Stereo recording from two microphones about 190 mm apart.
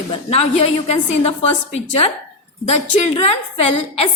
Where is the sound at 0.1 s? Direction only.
35° left (ahead or behind).